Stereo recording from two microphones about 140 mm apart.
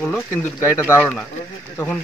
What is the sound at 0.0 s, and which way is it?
Speech, 15° left (ahead or behind).